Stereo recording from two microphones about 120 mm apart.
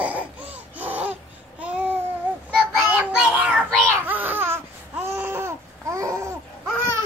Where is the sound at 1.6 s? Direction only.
10° right (ahead or behind).